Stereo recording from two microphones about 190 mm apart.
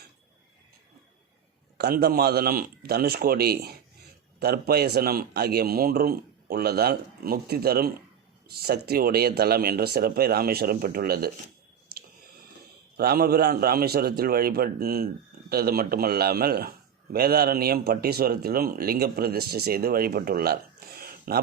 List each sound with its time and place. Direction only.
1.8 s a man's voice: 55° right (ahead or behind)
13.0 s a man's voice: 55° right (ahead or behind)